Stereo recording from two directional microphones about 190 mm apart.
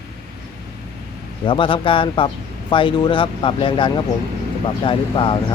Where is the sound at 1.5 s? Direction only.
25° left (ahead or behind).